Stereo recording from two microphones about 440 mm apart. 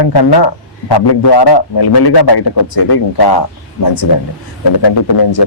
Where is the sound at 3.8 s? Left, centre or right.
Left.